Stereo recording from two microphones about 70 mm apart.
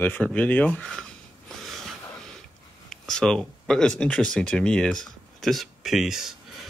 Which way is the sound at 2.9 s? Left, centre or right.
Centre.